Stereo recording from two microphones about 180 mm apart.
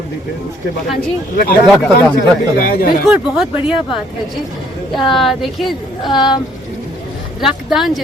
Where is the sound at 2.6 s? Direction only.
55° left (ahead or behind).